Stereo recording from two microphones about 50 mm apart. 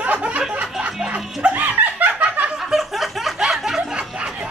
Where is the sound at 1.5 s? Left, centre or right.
Right.